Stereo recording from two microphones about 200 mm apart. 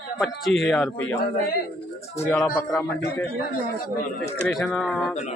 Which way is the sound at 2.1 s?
10° left (ahead or behind).